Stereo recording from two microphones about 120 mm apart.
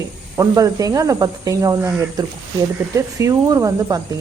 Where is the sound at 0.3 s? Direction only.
30° right (ahead or behind).